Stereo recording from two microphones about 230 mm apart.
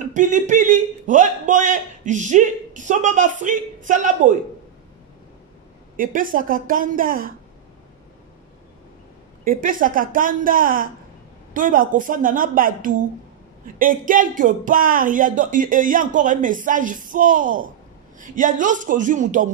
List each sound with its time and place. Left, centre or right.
0.1 s a man's voice: right
5.9 s a man's voice: right
9.4 s a man's voice: right